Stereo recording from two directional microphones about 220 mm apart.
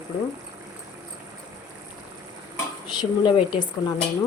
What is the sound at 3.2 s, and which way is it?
Speech, 20° left (ahead or behind).